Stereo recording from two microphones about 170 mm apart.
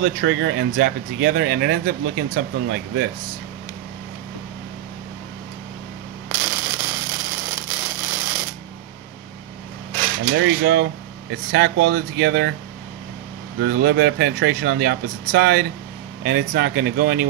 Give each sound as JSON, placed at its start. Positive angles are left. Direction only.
{"t": 0.0, "sound": "speech", "side_deg": -90}
{"t": 6.2, "sound": "a sound", "side_deg": -15}
{"t": 10.3, "sound": "speech", "side_deg": -90}
{"t": 13.6, "sound": "speech", "side_deg": -85}